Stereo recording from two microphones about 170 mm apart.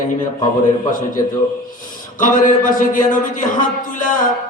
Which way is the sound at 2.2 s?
50° left (ahead or behind).